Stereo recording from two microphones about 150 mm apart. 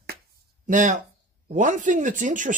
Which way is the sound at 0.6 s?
60° right (ahead or behind).